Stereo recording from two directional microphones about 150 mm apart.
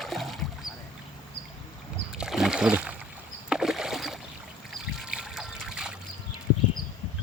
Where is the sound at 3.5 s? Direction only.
5° right (ahead or behind).